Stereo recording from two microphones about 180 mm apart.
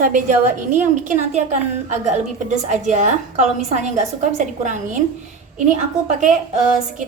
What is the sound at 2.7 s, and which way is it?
A woman's voice, 40° right (ahead or behind).